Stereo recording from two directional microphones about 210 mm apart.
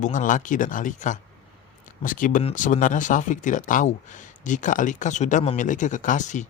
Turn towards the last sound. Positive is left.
turn(degrees=35)  # may be behind; listen again after turning